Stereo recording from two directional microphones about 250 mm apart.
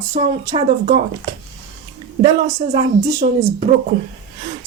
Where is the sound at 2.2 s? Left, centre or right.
Centre.